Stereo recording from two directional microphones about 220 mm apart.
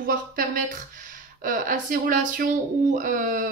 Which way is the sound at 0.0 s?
40° right (ahead or behind).